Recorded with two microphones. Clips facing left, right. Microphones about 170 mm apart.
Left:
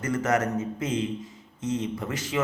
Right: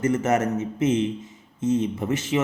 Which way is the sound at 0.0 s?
25° right (ahead or behind).